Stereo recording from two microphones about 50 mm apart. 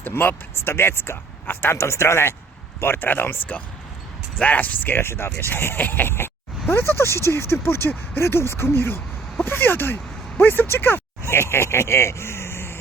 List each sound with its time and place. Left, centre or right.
0.1 s speech: left
1.7 s speech: left
2.8 s speech: left
4.4 s speech: left
4.9 s speech: left
11.3 s speech: left